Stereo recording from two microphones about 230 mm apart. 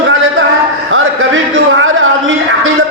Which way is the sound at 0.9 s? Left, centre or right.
Right.